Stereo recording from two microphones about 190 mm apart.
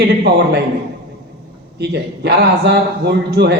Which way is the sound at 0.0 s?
60° right (ahead or behind).